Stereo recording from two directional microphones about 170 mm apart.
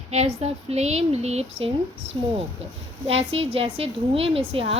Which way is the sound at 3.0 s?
35° right (ahead or behind).